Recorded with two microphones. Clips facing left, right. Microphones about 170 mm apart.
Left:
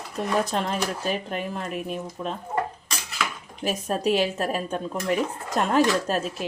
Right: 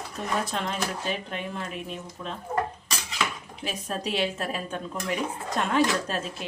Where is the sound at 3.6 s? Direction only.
45° left (ahead or behind).